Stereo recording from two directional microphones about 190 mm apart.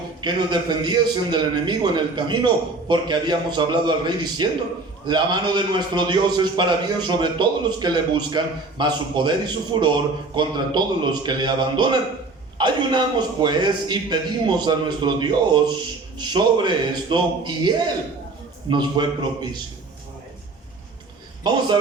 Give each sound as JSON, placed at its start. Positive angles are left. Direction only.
{"t": 0.2, "sound": "a man's voice", "side_deg": -25}
{"t": 21.5, "sound": "a man's voice", "side_deg": -20}